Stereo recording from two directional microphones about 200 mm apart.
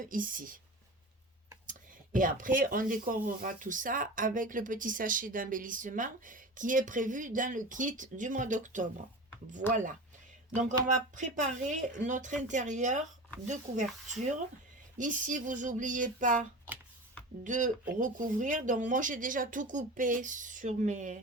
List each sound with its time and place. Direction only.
0.0 s speech: 45° right (ahead or behind)
2.1 s speech: 40° right (ahead or behind)
11.1 s speech: 40° right (ahead or behind)